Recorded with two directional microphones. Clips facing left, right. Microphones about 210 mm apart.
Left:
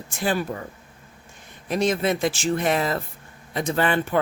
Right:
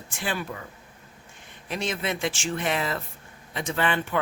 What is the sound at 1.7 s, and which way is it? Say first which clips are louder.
A man's voice: left 7 dB; 40° left (ahead or behind).